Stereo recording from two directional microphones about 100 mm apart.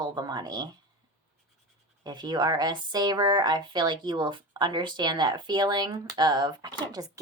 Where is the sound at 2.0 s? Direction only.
45° right (ahead or behind).